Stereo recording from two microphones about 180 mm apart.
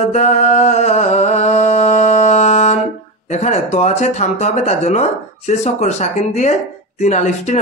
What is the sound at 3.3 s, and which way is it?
Speech, 40° left (ahead or behind).